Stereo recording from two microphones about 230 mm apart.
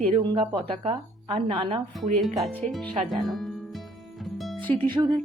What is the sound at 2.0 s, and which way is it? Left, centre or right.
Speech, centre.